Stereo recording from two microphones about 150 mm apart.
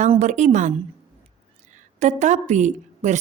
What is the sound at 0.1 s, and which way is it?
Speech, 50° right (ahead or behind).